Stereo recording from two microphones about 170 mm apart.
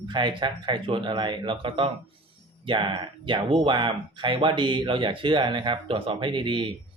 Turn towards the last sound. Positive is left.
turn(degrees=-30)  # may be behind; listen again after turning